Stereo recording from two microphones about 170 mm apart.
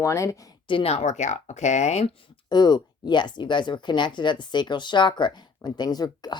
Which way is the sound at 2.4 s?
25° left (ahead or behind).